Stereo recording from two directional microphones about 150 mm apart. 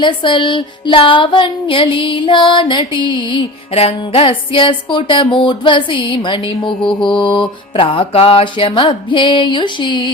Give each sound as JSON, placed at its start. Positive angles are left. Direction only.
{"t": 0.0, "sound": "music", "side_deg": 35}